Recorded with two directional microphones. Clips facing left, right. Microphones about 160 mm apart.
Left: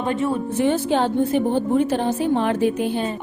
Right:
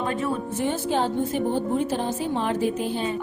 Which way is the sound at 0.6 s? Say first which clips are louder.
Left 5 dB; 75° left (ahead or behind).